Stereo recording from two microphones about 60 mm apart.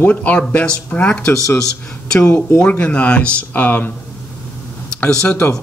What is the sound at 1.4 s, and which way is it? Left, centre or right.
Speech, centre.